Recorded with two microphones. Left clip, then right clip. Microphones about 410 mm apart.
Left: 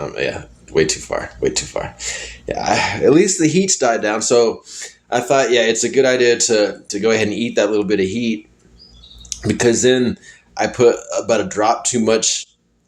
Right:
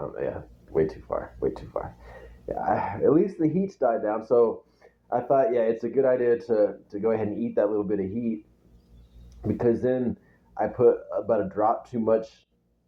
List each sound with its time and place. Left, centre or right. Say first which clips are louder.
0.7 s speech: left 9 dB; right
9.3 s speech: left 9 dB; right